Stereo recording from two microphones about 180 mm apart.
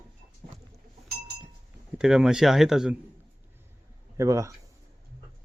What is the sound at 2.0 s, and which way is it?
Speech, 5° right (ahead or behind).